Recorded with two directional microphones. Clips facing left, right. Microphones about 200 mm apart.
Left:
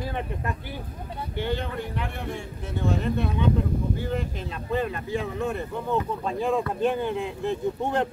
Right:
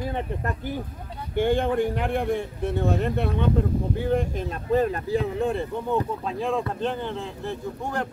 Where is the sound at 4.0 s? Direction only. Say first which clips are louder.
Right 5 dB; 50° right (ahead or behind); by 5.7 s 30° right (ahead or behind).